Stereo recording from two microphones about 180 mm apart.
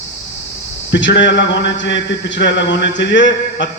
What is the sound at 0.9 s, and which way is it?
A man's voice, 80° left.